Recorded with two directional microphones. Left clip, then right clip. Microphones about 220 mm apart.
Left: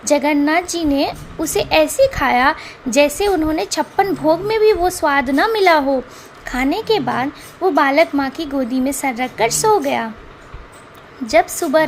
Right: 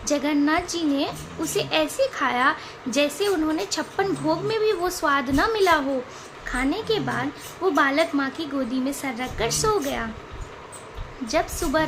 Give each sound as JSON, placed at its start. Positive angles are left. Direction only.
{"t": 0.1, "sound": "a woman's voice", "side_deg": 25}
{"t": 11.3, "sound": "a woman's voice", "side_deg": 25}